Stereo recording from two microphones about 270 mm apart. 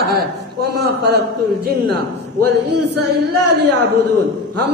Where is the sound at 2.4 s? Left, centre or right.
Right.